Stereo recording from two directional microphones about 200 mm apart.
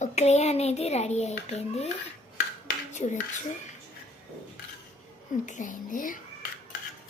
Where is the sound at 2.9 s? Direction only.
35° left (ahead or behind).